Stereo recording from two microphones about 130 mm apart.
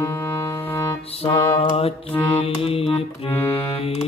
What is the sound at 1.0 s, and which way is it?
Music, 50° left (ahead or behind).